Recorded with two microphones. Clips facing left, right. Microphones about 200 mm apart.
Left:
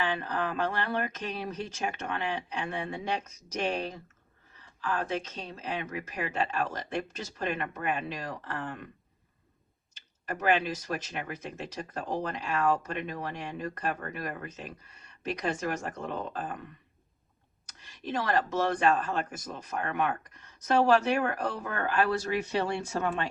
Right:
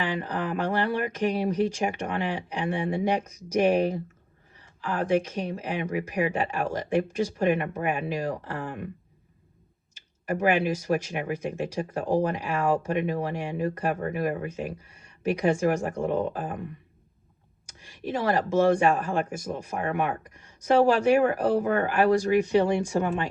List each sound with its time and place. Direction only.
0.0 s speech: 15° right (ahead or behind)
9.9 s speech: 10° right (ahead or behind)
17.7 s speech: 10° right (ahead or behind)